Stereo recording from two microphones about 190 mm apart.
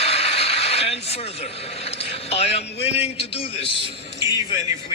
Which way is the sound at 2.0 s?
30° left (ahead or behind).